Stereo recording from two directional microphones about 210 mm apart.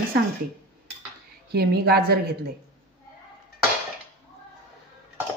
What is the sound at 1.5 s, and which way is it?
Speech, 50° right (ahead or behind).